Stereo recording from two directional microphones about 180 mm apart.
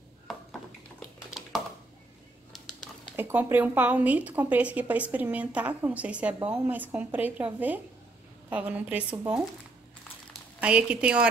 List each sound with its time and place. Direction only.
0.3 s a sound: centre (ahead or behind)
3.2 s a woman's voice: 10° right (ahead or behind)
10.6 s a woman's voice: 5° right (ahead or behind)